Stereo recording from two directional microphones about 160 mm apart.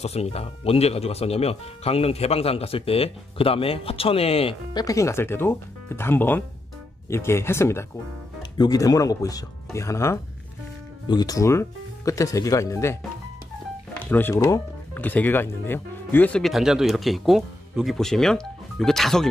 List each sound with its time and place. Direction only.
0.0 s speech: 40° left (ahead or behind)
4.8 s speech: 20° left (ahead or behind)
13.9 s speech: 10° left (ahead or behind)